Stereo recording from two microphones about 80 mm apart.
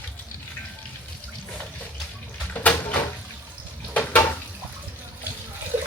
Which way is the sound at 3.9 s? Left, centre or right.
Left.